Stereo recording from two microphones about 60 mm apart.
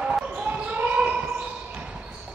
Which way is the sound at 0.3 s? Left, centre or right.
Right.